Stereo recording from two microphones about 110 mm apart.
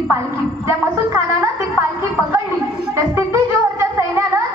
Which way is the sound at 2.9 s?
25° right (ahead or behind).